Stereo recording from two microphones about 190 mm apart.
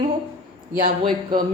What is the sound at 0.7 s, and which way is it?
Speech, 50° right (ahead or behind).